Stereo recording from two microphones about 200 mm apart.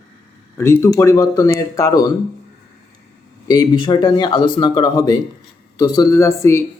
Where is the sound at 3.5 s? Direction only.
20° left (ahead or behind).